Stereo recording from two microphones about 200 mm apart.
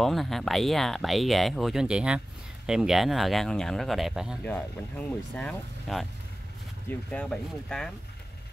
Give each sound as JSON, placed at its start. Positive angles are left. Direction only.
{"t": 0.0, "sound": "speech", "side_deg": 0}